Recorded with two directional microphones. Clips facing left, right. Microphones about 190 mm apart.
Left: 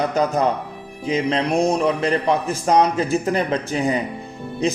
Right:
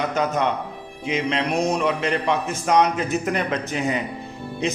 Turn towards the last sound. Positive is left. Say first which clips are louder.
# left 3 dB
turn(degrees=35)  # may be behind; listen again after turning